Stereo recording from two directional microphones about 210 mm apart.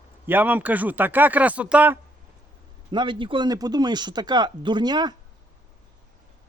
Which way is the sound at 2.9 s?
20° right (ahead or behind).